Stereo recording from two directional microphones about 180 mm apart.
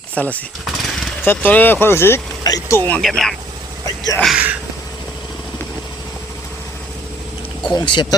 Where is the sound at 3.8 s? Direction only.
20° left (ahead or behind).